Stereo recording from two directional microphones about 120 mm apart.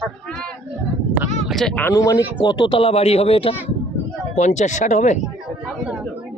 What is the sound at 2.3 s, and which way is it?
Speech, 40° left (ahead or behind).